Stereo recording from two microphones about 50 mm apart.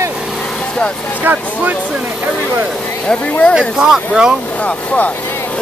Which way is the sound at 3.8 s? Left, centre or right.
Centre.